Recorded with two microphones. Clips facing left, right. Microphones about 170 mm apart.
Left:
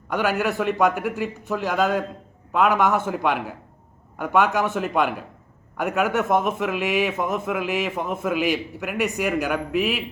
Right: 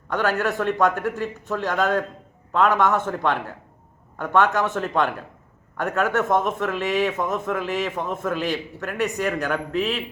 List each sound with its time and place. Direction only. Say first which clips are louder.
0.1 s a man's voice: even; 10° left (ahead or behind)